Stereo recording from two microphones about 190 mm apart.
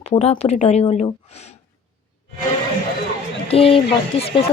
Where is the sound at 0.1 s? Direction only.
35° left (ahead or behind).